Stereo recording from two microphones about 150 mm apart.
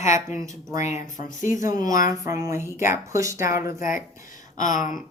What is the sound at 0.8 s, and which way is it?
Speech, 55° left (ahead or behind).